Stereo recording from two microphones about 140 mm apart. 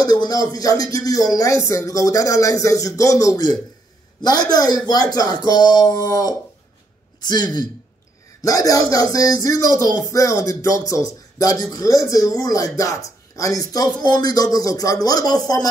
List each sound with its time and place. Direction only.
0.0 s speech: 30° left (ahead or behind)